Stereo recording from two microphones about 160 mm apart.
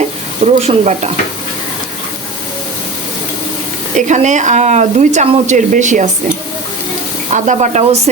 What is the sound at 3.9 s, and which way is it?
Speech, 50° right (ahead or behind).